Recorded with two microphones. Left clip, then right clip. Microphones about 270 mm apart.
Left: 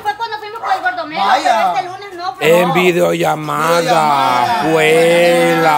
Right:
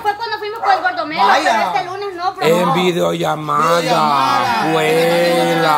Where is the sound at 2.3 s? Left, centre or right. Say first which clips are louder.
Left 4 dB; centre.